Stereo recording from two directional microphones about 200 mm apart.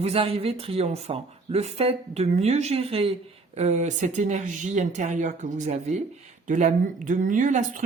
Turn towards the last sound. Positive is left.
turn(degrees=-40)  # may be behind; listen again after turning